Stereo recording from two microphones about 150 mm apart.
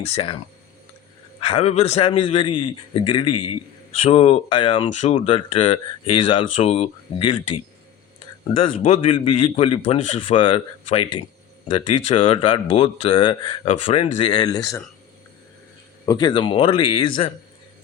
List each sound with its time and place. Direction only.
0.1 s speech: 35° left (ahead or behind)
1.4 s speech: 40° left (ahead or behind)
8.8 s speech: 40° left (ahead or behind); by 14.8 s 25° left (ahead or behind)
16.0 s speech: 30° left (ahead or behind)